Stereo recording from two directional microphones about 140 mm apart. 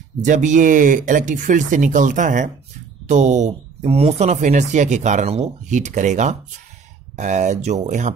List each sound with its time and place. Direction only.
0.2 s speech: 60° right (ahead or behind)